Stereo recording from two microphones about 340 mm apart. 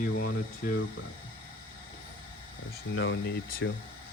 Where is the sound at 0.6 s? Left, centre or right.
Left.